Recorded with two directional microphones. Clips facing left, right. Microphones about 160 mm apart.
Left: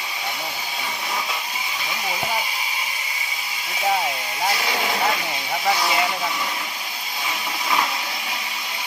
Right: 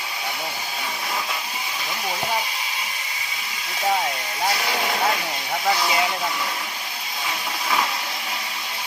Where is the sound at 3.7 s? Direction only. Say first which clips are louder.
Even; 5° left (ahead or behind).